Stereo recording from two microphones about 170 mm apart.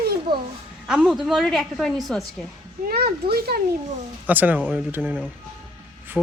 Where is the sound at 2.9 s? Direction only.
65° right (ahead or behind).